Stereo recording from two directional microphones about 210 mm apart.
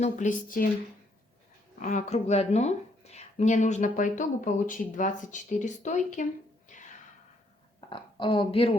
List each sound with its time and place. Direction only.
0.0 s speech: 35° left (ahead or behind)
1.8 s speech: 35° left (ahead or behind)
6.7 s a sound: 35° left (ahead or behind)
7.9 s a woman's voice: 25° left (ahead or behind)